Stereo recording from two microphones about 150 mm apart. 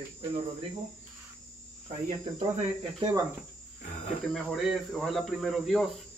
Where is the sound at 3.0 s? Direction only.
30° right (ahead or behind).